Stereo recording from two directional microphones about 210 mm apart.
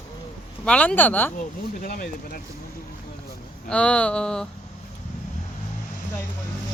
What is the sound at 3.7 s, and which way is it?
Speech, 5° left (ahead or behind).